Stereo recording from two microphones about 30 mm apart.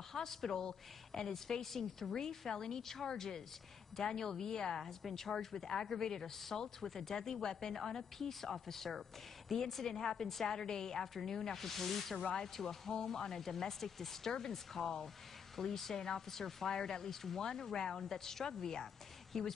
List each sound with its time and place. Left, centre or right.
0.1 s a woman's voice: centre
16.6 s a woman's voice: centre